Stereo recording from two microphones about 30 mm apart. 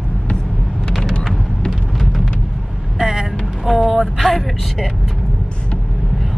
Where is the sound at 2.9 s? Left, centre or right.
Centre.